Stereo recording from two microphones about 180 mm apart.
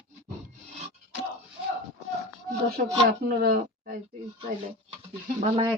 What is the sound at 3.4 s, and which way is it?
Speech, 55° right (ahead or behind).